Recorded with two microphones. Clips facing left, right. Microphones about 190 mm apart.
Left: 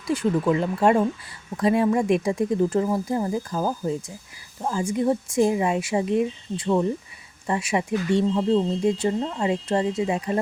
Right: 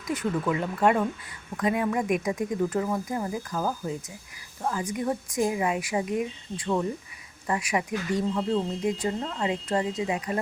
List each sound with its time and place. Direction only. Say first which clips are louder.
0.1 s speech: left 5 dB; 30° left (ahead or behind)